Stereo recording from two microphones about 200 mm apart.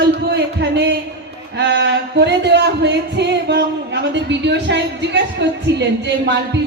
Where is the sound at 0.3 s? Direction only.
60° right (ahead or behind).